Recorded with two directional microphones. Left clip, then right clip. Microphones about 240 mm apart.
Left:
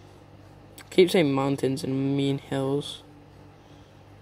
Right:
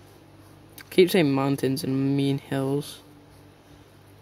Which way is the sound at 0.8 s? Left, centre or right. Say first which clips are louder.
Even; centre.